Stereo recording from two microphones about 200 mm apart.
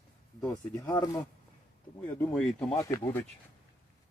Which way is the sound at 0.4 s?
15° left (ahead or behind).